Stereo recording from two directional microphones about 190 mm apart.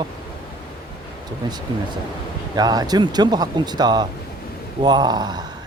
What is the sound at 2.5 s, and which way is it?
Speech, 20° right (ahead or behind).